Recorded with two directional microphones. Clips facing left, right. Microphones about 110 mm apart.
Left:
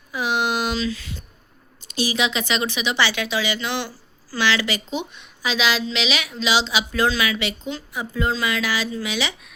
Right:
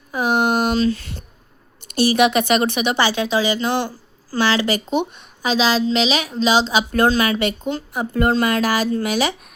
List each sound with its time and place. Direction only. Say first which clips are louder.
0.1 s a sound: right 5 dB; 45° right (ahead or behind)
1.9 s a woman's voice: right 8 dB; 55° right (ahead or behind)
3.1 s a woman's voice: right 5 dB; 35° right (ahead or behind)